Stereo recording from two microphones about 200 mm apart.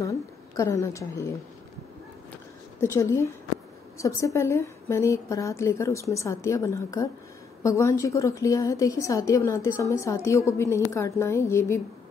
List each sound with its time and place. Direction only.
0.0 s a woman's voice: 15° left (ahead or behind)
2.8 s a woman's voice: 15° left (ahead or behind)